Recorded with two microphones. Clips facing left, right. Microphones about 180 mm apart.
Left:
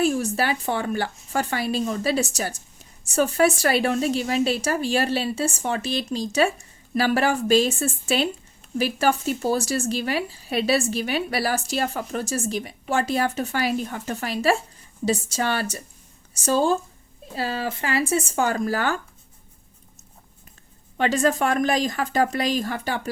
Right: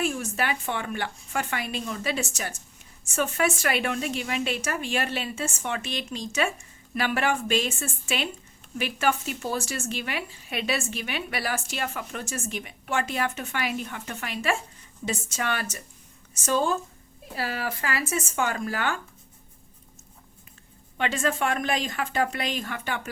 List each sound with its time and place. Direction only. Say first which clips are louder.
0.0 s a woman's voice: left 6 dB; 35° left (ahead or behind)
21.0 s a woman's voice: left 5 dB; 40° left (ahead or behind)